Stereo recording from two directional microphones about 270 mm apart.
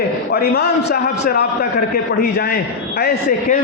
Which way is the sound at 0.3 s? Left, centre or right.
Left.